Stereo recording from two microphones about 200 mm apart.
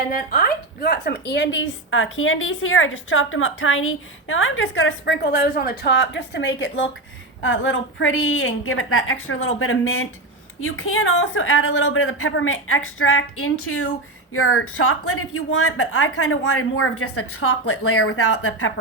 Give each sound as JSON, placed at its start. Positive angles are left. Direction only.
{"t": 0.1, "sound": "a woman's voice", "side_deg": 45}